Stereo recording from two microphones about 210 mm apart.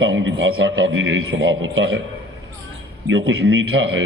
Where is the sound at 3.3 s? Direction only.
70° right (ahead or behind).